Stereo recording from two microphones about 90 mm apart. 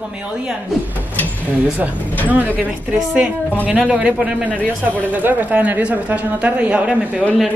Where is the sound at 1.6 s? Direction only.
15° right (ahead or behind).